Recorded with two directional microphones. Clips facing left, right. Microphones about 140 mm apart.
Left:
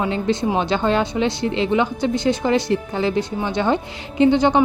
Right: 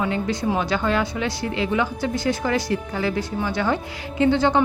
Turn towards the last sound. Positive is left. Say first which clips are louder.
# left 3 dB
turn(degrees=20)  # may be behind; listen again after turning